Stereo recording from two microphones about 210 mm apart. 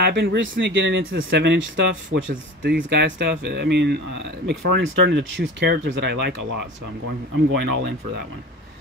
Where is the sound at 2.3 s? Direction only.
40° right (ahead or behind).